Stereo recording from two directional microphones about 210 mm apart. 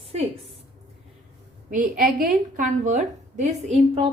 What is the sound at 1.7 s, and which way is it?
A woman's voice, 40° right (ahead or behind).